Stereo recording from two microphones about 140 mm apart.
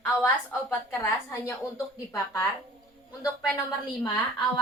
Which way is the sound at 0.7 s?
15° left (ahead or behind).